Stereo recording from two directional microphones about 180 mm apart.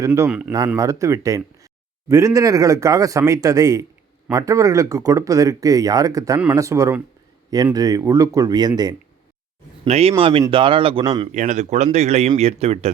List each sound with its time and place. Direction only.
0.0 s speech: 15° right (ahead or behind)
0.3 s speech: 5° right (ahead or behind)
0.8 s speech: 15° right (ahead or behind)
9.8 s speech: 35° right (ahead or behind)
11.3 s speech: 40° right (ahead or behind)